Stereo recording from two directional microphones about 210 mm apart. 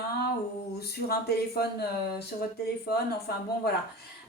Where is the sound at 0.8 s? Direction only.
50° left (ahead or behind).